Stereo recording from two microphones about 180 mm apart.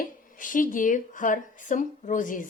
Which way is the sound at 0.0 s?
50° left (ahead or behind).